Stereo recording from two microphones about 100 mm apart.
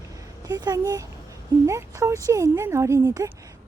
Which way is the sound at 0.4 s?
40° right (ahead or behind).